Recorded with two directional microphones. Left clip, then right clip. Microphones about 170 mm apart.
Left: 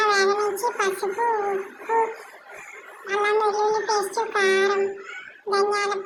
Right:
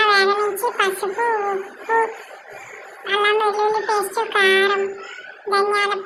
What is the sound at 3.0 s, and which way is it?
A child's voice, 30° right (ahead or behind).